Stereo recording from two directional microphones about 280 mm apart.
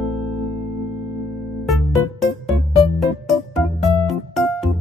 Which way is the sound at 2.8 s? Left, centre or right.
Centre.